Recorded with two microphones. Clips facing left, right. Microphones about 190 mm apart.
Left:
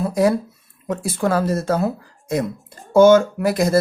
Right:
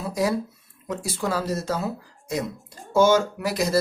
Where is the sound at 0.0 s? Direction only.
55° left (ahead or behind).